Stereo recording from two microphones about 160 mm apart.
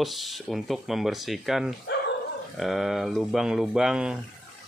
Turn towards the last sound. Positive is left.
turn(degrees=-5)  # may be behind; listen again after turning